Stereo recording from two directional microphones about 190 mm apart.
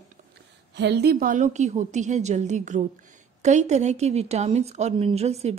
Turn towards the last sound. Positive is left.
turn(degrees=-35)  # may be behind; listen again after turning